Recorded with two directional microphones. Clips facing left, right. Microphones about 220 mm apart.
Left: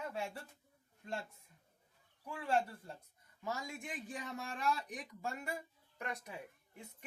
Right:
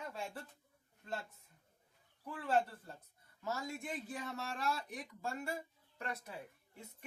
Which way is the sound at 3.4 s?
15° left (ahead or behind).